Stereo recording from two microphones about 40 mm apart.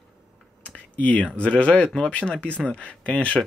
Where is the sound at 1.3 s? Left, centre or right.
Left.